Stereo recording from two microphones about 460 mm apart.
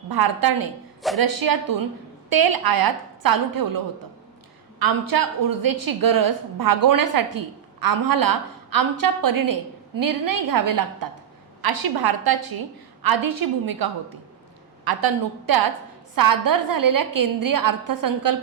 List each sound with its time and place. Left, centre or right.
1.0 s speech: centre
1.5 s a woman's voice: right
4.8 s a woman's voice: right
14.8 s a woman's voice: right